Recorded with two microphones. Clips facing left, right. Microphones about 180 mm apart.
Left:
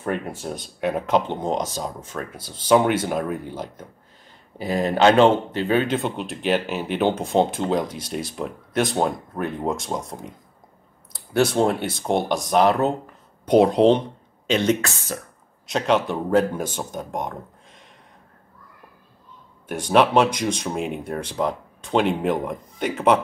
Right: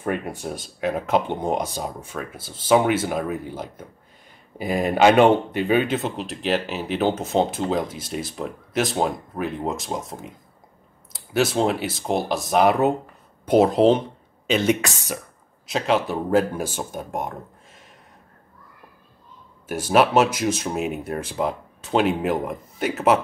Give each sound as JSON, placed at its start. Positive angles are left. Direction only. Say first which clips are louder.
{"t": 0.0, "sound": "speech", "louder": "even", "side_deg": -10}
{"t": 0.7, "sound": "speech", "louder": "left 1 dB", "side_deg": 0}
{"t": 5.9, "sound": "speech", "louder": "left 1 dB", "side_deg": 0}
{"t": 14.8, "sound": "speech", "louder": "right 1 dB", "side_deg": -15}
{"t": 15.6, "sound": "speech", "louder": "left 1 dB", "side_deg": -5}
{"t": 19.7, "sound": "speech", "louder": "even", "side_deg": -5}